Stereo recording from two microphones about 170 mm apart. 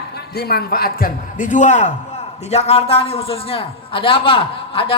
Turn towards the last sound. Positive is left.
turn(degrees=30)  # may be behind; listen again after turning